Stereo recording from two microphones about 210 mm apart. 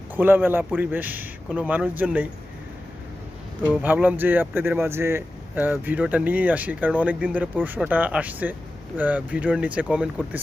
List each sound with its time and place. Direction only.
0.1 s speech: 10° right (ahead or behind)
3.8 s speech: 10° right (ahead or behind)